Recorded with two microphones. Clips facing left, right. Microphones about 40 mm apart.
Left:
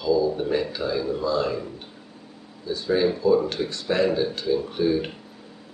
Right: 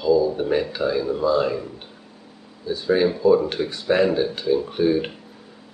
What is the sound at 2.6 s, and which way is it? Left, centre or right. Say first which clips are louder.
Speech: right 3 dB; centre.